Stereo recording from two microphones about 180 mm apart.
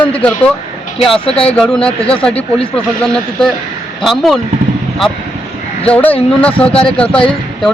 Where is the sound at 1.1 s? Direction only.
30° left (ahead or behind).